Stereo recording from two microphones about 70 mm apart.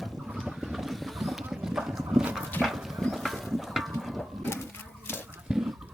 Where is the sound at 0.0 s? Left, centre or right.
Centre.